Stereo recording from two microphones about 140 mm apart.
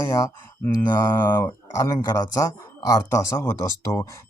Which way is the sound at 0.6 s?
20° left (ahead or behind).